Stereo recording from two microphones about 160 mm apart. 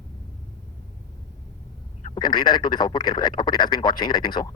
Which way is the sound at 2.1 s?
25° left (ahead or behind).